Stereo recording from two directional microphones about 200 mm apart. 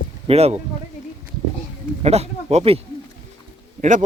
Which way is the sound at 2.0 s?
30° right (ahead or behind).